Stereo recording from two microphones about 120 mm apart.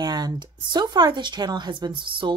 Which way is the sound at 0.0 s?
35° right (ahead or behind).